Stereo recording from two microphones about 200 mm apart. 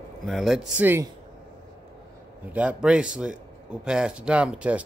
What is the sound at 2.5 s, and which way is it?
Speech, 5° right (ahead or behind).